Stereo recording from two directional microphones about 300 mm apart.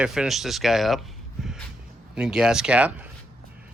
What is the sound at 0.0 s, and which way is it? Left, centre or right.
Speech, centre.